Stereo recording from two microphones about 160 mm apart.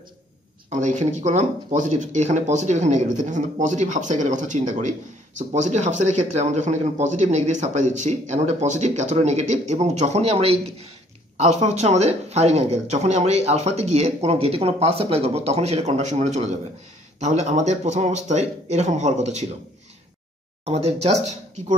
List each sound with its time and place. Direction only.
0.7 s speech: 50° right (ahead or behind)
20.6 s speech: 40° right (ahead or behind)